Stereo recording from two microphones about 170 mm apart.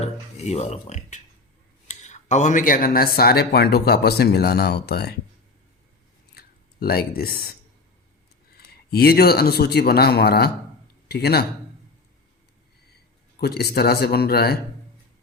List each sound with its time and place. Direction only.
0.0 s speech: 40° left (ahead or behind); by 5.1 s 75° left (ahead or behind)
6.3 s a sound: 65° left (ahead or behind)
8.5 s speech: 65° left (ahead or behind)
13.4 s speech: 70° left (ahead or behind)